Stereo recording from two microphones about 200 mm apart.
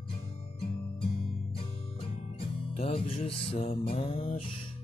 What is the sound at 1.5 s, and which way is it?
Music, 25° left (ahead or behind).